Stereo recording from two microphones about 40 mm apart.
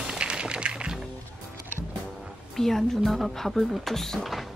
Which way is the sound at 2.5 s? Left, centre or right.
Centre.